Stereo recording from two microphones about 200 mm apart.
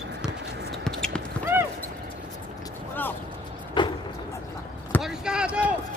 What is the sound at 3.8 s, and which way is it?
Vehicle, 25° left (ahead or behind).